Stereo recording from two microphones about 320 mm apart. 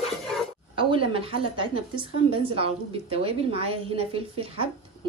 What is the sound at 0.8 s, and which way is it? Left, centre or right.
A woman's voice, centre.